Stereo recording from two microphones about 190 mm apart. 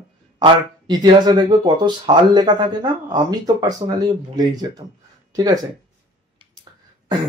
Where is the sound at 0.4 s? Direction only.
20° right (ahead or behind).